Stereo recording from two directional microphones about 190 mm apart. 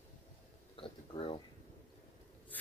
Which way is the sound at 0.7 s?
30° left (ahead or behind).